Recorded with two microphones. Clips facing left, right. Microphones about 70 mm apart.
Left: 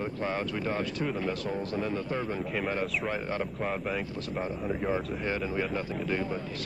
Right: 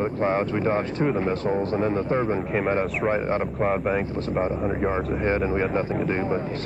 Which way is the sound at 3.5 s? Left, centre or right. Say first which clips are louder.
Right 9 dB; right.